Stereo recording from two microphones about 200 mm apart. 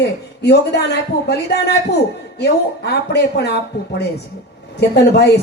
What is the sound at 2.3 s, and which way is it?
Speech, 55° left (ahead or behind).